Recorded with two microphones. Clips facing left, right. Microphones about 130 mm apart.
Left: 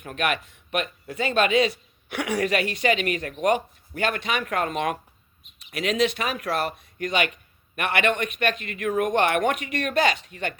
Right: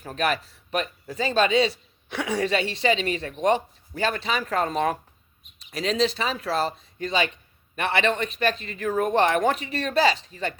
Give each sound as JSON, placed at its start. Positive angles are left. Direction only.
{"t": 0.0, "sound": "speech", "side_deg": -35}